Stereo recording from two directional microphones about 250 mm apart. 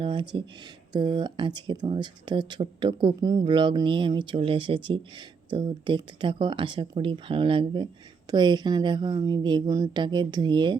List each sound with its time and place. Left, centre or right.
0.0 s speech: centre